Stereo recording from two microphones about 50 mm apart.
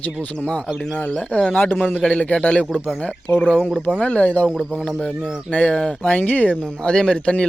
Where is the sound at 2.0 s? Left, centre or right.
Left.